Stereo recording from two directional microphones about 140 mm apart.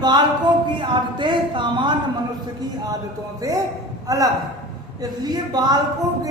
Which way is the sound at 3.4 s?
25° right (ahead or behind).